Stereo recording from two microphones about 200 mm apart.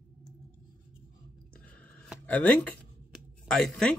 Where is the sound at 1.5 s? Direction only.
5° left (ahead or behind).